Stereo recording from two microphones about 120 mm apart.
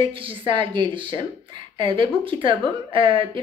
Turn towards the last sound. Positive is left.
turn(degrees=-45)  # may be behind; listen again after turning